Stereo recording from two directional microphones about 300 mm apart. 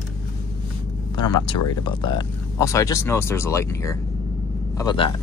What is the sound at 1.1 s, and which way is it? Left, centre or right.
Speech, centre.